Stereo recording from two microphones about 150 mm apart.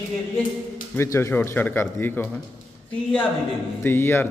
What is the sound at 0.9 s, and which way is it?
A man's voice, 15° left (ahead or behind).